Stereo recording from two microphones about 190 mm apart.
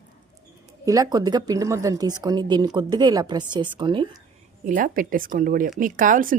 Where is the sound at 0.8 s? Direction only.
20° right (ahead or behind).